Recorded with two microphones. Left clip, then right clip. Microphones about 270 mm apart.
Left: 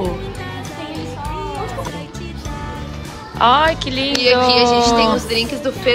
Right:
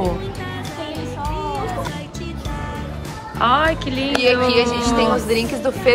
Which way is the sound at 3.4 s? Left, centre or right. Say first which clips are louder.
Left 3 dB; centre.